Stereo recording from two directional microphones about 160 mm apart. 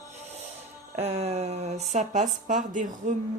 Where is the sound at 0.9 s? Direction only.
40° right (ahead or behind).